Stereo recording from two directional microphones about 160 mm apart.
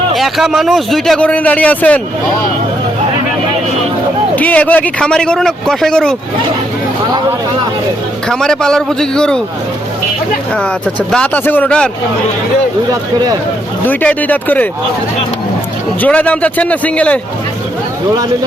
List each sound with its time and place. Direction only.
0.1 s a man's voice: centre (ahead or behind)
4.4 s a man's voice: 10° left (ahead or behind)
8.3 s a man's voice: 5° left (ahead or behind)
11.1 s a man's voice: 10° left (ahead or behind)
12.9 s speech: 25° right (ahead or behind)
13.8 s a man's voice: 10° left (ahead or behind)
16.0 s a man's voice: 10° left (ahead or behind)